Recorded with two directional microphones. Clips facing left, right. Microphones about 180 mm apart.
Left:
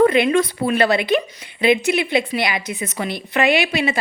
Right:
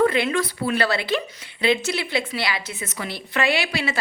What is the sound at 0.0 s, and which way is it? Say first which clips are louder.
A woman's voice: left 5 dB; 20° left (ahead or behind).